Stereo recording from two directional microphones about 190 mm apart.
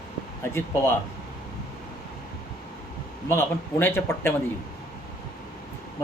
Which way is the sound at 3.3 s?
15° left (ahead or behind).